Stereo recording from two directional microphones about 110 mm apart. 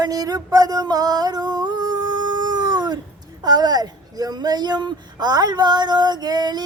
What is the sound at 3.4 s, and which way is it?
Speech, 40° right (ahead or behind).